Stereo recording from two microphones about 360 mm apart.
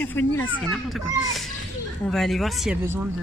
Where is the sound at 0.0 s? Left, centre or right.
Centre.